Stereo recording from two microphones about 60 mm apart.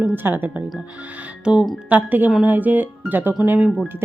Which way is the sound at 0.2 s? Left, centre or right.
Right.